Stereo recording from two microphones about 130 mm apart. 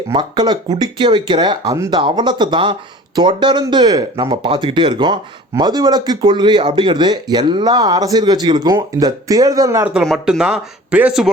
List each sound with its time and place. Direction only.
0.1 s speech: 35° right (ahead or behind)
9.8 s speech: 5° right (ahead or behind)